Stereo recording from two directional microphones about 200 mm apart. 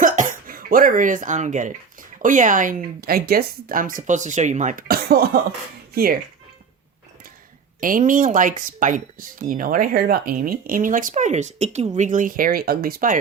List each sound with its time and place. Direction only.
0.0 s speech: 45° right (ahead or behind)
7.8 s speech: 45° right (ahead or behind)